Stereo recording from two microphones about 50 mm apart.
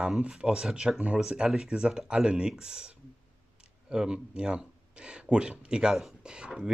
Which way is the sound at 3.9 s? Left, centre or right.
Centre.